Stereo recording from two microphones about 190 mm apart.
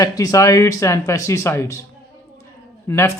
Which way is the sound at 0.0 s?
20° left (ahead or behind).